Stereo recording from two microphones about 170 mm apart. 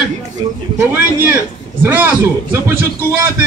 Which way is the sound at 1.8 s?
15° right (ahead or behind).